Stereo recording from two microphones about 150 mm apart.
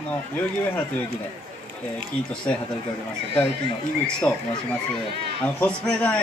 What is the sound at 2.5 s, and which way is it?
Speech, 10° left (ahead or behind).